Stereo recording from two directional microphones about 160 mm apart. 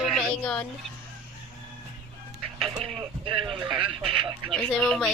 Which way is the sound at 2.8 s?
35° right (ahead or behind).